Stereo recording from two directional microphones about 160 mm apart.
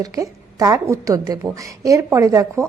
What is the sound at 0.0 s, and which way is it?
A woman's voice, 20° right (ahead or behind).